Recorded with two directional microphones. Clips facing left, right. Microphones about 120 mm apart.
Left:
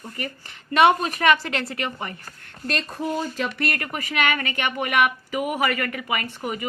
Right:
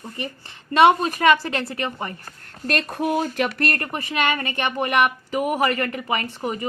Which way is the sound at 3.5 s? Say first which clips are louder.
Right 2 dB; 50° right (ahead or behind).